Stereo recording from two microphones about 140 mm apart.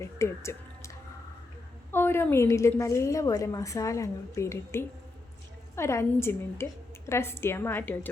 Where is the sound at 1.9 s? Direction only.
15° left (ahead or behind).